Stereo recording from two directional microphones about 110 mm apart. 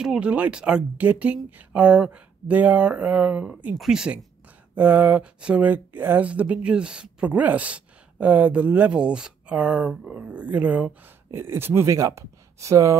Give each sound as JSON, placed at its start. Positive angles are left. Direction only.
{"t": 0.0, "sound": "speech", "side_deg": -10}